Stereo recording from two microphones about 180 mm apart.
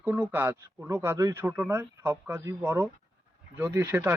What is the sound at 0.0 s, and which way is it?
Speech, 10° right (ahead or behind).